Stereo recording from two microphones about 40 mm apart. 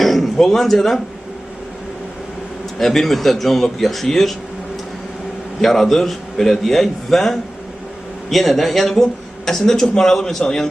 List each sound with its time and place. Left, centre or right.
0.0 s a man's voice: centre
2.7 s a man's voice: centre
5.6 s a man's voice: centre